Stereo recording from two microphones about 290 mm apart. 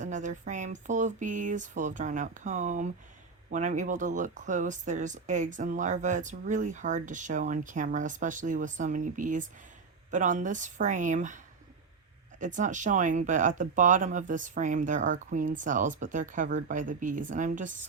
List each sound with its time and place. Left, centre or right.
0.0 s speech: right
12.5 s speech: right